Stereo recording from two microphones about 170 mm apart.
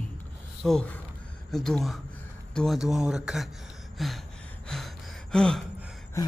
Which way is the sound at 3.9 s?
Centre (ahead or behind).